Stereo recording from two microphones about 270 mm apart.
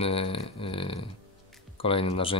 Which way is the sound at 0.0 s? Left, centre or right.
Left.